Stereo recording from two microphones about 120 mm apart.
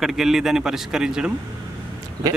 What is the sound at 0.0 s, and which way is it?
A man's voice, 5° right (ahead or behind).